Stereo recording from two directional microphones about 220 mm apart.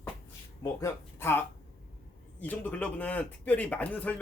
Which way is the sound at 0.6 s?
15° left (ahead or behind).